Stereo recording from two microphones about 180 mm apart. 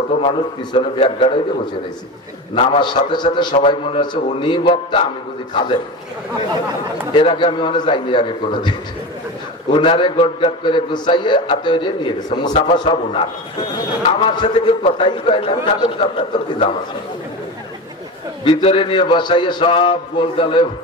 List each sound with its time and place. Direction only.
0.2 s a man's voice: 35° left (ahead or behind)
2.5 s a man's voice: 30° left (ahead or behind)
7.2 s a man's voice: 30° left (ahead or behind)
14.2 s a man's voice: 25° left (ahead or behind)
18.4 s a man's voice: 30° left (ahead or behind)